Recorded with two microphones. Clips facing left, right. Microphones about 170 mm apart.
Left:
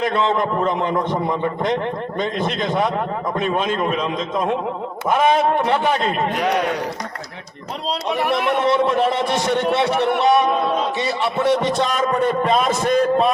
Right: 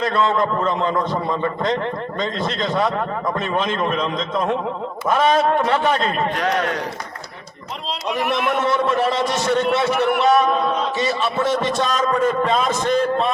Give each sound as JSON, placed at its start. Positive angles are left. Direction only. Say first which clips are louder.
{"t": 0.0, "sound": "speech", "louder": "even", "side_deg": 20}
{"t": 8.6, "sound": "a man's voice", "louder": "left 2 dB", "side_deg": 20}